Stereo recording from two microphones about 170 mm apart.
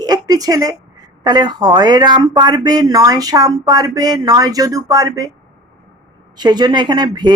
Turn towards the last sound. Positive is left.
turn(degrees=-25)  # may be behind; listen again after turning